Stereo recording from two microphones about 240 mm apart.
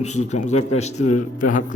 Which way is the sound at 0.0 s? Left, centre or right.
Left.